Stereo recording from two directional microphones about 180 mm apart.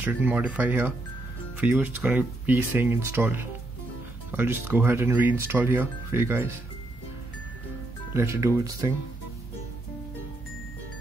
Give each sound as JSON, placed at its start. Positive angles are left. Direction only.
{"t": 0.0, "sound": "speech", "side_deg": -10}
{"t": 8.1, "sound": "speech", "side_deg": -15}